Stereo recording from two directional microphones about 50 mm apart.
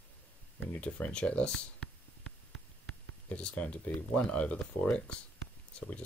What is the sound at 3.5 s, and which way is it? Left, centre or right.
Speech, left.